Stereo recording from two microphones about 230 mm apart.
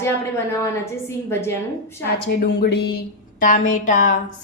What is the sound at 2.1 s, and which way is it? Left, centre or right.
A woman's voice, left.